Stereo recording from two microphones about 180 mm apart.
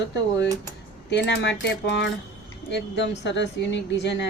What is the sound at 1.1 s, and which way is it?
A woman's voice, 70° left (ahead or behind).